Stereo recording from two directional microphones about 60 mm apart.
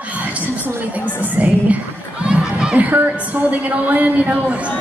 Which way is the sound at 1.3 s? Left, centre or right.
Right.